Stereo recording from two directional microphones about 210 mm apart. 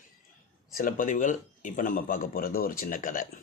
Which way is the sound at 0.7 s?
40° left (ahead or behind).